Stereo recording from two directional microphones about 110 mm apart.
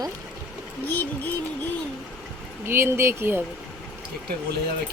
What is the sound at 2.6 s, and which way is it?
Speech, 20° right (ahead or behind).